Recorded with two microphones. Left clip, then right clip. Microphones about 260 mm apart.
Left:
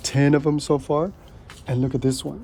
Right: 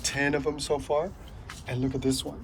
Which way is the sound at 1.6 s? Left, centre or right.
Left.